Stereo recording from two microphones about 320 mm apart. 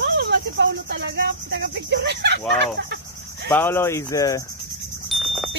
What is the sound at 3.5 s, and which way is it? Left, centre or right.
Speech, centre.